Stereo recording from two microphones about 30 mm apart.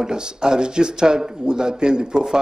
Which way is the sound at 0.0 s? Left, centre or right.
Right.